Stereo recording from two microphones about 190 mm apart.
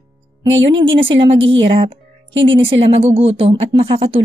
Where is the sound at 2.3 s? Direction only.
75° right (ahead or behind).